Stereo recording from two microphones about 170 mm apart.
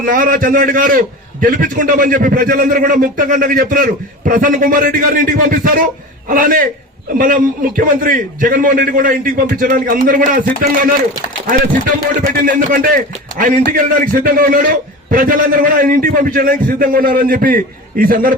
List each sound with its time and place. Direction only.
0.0 s a man's voice: 55° right (ahead or behind)
12.4 s a man's voice: 55° right (ahead or behind)